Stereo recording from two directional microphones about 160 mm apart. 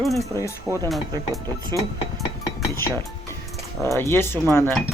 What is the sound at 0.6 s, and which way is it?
Speech, 15° right (ahead or behind).